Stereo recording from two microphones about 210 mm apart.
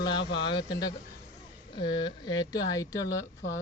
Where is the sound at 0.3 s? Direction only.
25° left (ahead or behind).